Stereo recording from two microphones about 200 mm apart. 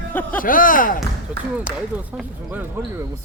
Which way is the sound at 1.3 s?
5° right (ahead or behind).